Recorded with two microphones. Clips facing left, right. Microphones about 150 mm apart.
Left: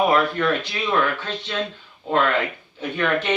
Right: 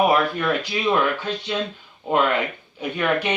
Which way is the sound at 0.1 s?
10° right (ahead or behind).